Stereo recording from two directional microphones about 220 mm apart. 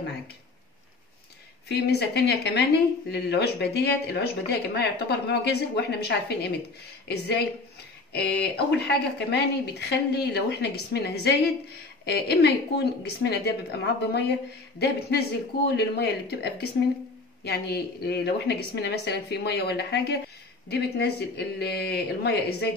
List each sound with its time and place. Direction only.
1.7 s speech: 50° left (ahead or behind)